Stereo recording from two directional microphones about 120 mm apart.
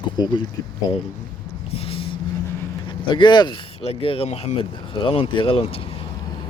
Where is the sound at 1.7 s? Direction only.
50° left (ahead or behind).